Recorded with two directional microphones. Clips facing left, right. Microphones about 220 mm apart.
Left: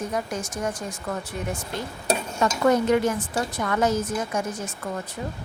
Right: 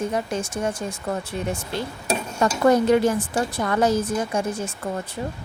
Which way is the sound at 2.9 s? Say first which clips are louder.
Right 3 dB; 30° right (ahead or behind).